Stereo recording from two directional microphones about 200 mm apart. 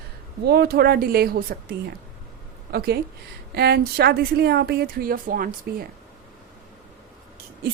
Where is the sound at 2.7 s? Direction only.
55° right (ahead or behind).